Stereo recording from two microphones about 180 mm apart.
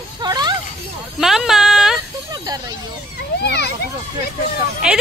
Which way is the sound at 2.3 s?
20° right (ahead or behind).